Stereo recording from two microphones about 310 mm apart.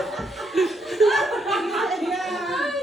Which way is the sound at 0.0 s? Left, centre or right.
Centre.